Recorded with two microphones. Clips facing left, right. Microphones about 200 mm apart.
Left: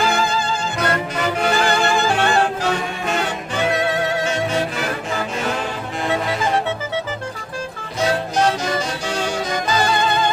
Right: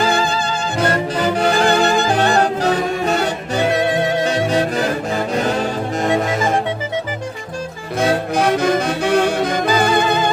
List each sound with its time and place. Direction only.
0.0 s music: 30° right (ahead or behind)
7.9 s music: 55° right (ahead or behind)